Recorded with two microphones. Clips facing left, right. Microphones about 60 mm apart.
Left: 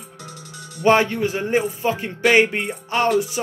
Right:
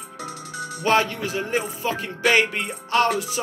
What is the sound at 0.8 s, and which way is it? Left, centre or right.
Speech, left.